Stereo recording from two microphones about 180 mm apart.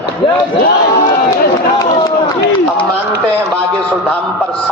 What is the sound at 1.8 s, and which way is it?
Run, 20° left (ahead or behind).